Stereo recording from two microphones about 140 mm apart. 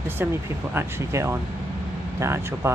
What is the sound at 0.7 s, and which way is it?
Speech, 20° right (ahead or behind).